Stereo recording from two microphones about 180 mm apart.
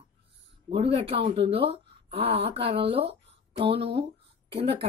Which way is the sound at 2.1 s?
35° right (ahead or behind).